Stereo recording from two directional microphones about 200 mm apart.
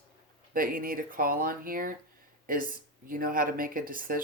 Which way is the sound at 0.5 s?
45° right (ahead or behind).